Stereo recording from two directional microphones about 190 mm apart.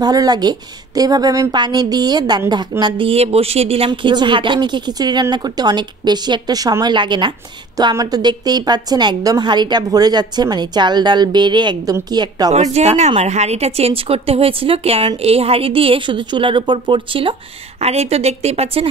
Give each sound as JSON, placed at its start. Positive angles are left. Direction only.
{"t": 0.0, "sound": "a woman's voice", "side_deg": -20}
{"t": 12.5, "sound": "a woman's voice", "side_deg": -35}